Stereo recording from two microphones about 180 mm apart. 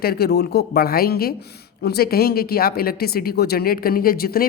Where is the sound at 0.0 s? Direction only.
60° left (ahead or behind).